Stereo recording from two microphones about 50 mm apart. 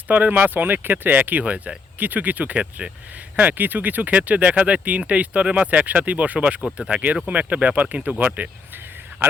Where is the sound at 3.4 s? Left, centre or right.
Right.